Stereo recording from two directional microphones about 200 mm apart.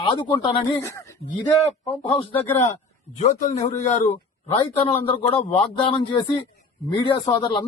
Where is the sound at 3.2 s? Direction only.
40° left (ahead or behind).